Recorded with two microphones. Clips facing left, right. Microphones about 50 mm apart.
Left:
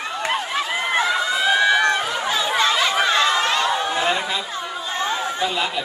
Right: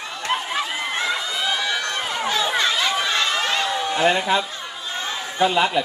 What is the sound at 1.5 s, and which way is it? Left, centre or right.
Run, left.